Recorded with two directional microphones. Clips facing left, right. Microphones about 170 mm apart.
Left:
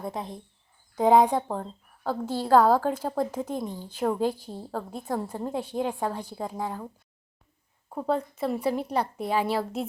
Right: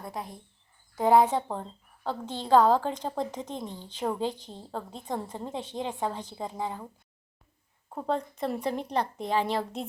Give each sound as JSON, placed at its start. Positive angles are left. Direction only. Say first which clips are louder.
{"t": 0.1, "sound": "a woman's voice", "louder": "left 3 dB", "side_deg": 25}
{"t": 7.9, "sound": "a woman's voice", "louder": "left 3 dB", "side_deg": 5}